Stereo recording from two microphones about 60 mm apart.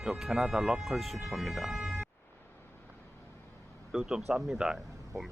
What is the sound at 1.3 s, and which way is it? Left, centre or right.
Music, centre.